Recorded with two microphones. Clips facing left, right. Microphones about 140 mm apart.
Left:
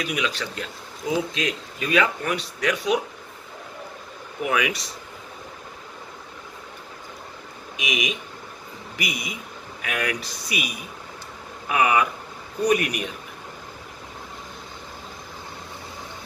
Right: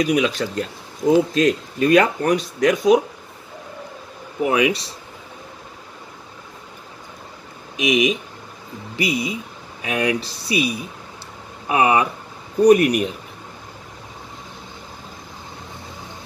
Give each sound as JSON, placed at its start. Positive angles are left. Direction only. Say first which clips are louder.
{"t": 0.0, "sound": "speech", "louder": "right 9 dB", "side_deg": -40}
{"t": 4.4, "sound": "speech", "louder": "right 6 dB", "side_deg": -30}
{"t": 7.7, "sound": "speech", "louder": "right 10 dB", "side_deg": -35}